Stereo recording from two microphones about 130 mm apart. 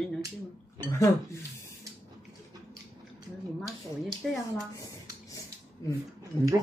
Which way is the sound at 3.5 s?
Centre (ahead or behind).